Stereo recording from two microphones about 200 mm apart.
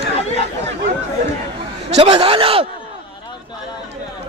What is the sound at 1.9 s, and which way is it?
Speech, 30° right (ahead or behind).